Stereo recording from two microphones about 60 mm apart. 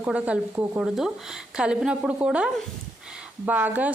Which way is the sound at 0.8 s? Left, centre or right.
Centre.